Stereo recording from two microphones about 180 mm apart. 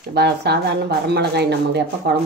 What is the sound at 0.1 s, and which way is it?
Speech, 65° right (ahead or behind).